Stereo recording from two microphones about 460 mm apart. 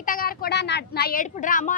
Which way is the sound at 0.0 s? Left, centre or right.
Centre.